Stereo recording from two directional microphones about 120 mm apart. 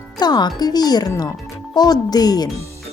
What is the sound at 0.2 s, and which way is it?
Speech, 35° left (ahead or behind).